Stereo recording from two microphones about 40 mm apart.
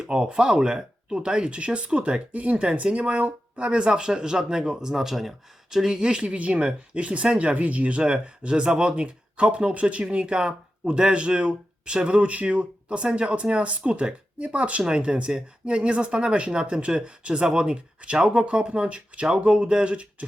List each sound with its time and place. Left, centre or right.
0.0 s speech: right
8.0 s speech: right
14.8 s speech: right